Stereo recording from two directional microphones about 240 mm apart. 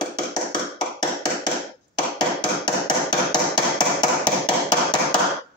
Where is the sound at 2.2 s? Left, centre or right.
Centre.